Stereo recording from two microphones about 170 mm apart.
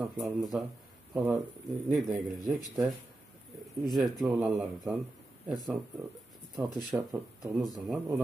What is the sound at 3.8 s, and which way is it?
Speech, centre (ahead or behind).